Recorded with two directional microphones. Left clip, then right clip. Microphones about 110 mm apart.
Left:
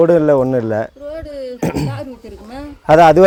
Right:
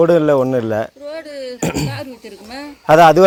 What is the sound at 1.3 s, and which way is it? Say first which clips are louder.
Throat clearing: left 1 dB; 35° left (ahead or behind).